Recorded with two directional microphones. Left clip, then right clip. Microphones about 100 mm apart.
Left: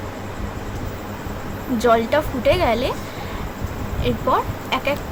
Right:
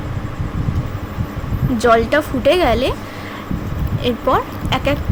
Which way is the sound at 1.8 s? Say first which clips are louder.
Right 3 dB; 80° right.